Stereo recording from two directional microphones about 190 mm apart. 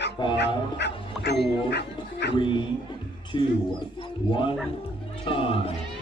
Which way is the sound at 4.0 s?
25° left (ahead or behind).